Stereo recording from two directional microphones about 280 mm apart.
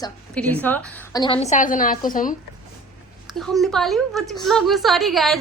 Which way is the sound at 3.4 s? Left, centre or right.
Centre.